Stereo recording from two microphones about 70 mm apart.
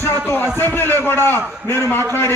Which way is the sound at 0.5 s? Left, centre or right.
Left.